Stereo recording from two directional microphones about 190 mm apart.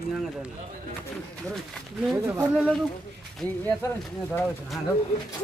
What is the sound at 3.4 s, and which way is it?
Speech, 10° left (ahead or behind).